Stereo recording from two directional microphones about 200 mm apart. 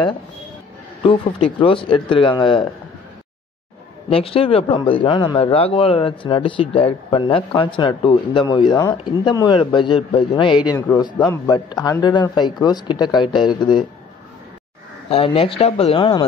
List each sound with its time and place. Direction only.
1.0 s speech: 25° left (ahead or behind)
4.1 s speech: 30° left (ahead or behind)
15.0 s speech: 30° left (ahead or behind)